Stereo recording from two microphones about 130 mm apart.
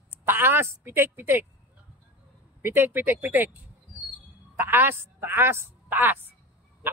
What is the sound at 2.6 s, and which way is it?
Speech, 15° right (ahead or behind).